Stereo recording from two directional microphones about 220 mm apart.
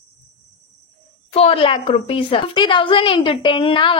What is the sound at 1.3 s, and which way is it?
A woman's voice, 25° left (ahead or behind).